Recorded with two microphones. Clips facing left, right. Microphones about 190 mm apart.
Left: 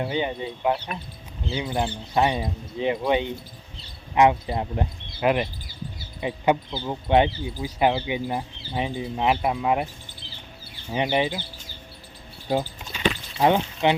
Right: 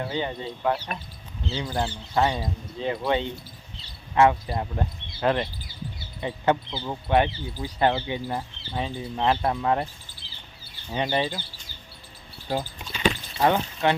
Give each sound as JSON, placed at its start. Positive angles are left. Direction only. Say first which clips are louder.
{"t": 0.0, "sound": "speech", "louder": "left 3 dB", "side_deg": 15}
{"t": 10.9, "sound": "speech", "louder": "left 2 dB", "side_deg": 15}
{"t": 13.4, "sound": "speech", "louder": "left 2 dB", "side_deg": 15}